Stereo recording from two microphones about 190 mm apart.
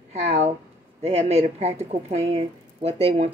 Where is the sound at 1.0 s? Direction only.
35° right (ahead or behind).